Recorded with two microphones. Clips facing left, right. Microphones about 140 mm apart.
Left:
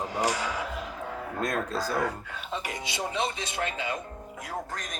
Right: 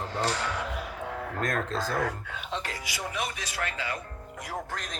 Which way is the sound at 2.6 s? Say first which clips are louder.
Left 3 dB; 25° left (ahead or behind).